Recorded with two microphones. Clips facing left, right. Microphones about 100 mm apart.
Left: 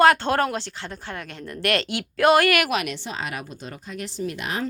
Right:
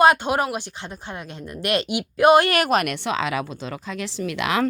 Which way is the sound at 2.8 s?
60° right (ahead or behind).